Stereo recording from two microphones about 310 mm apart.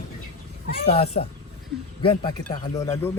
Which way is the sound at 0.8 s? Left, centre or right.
Centre.